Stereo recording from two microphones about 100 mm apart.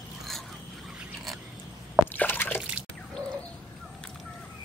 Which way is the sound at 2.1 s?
20° left (ahead or behind).